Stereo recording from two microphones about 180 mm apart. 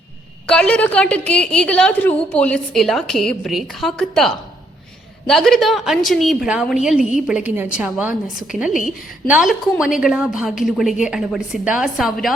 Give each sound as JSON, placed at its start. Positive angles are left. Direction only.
{"t": 0.4, "sound": "a woman's voice", "side_deg": 5}